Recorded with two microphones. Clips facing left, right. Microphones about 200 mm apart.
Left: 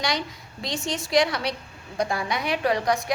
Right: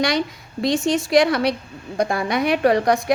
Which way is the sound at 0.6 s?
55° right (ahead or behind).